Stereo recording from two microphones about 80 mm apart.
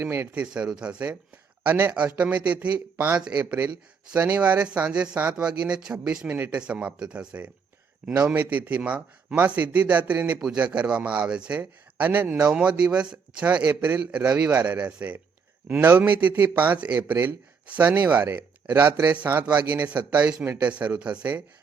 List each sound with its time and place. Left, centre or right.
0.0 s speech: right
0.3 s a man's voice: centre